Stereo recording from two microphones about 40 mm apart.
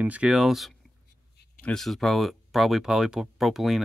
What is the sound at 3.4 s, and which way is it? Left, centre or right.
Speech, centre.